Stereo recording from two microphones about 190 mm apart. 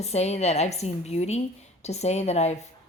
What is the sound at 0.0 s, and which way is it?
Speech, 35° left (ahead or behind).